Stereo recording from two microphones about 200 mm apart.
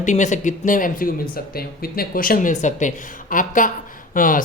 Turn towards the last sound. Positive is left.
turn(degrees=45)  # may be behind; listen again after turning